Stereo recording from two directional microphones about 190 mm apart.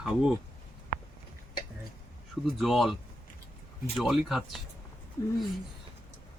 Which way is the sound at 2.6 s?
Centre (ahead or behind).